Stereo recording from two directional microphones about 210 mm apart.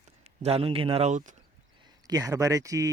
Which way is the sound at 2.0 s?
15° right (ahead or behind).